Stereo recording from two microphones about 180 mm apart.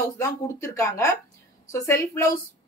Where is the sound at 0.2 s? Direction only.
15° left (ahead or behind).